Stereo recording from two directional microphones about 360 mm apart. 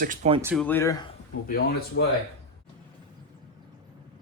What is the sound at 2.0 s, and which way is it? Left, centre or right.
Speech, left.